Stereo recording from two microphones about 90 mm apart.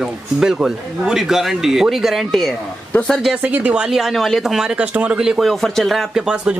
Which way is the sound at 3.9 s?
Centre (ahead or behind).